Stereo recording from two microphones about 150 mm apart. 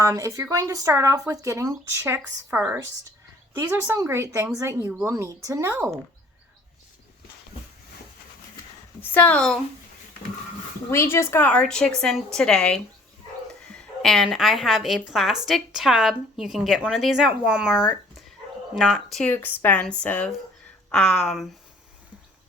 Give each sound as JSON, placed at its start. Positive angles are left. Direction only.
{"t": 0.0, "sound": "speech", "side_deg": -20}
{"t": 4.9, "sound": "speech", "side_deg": -10}
{"t": 5.1, "sound": "speech", "side_deg": -20}
{"t": 9.0, "sound": "a woman's voice", "side_deg": 10}
{"t": 10.9, "sound": "a woman's voice", "side_deg": 20}
{"t": 14.0, "sound": "a woman's voice", "side_deg": 0}